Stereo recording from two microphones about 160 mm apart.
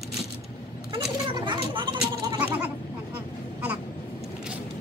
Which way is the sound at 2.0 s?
10° right (ahead or behind).